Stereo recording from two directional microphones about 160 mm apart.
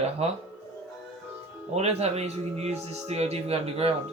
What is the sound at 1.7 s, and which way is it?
Speech, 40° right (ahead or behind).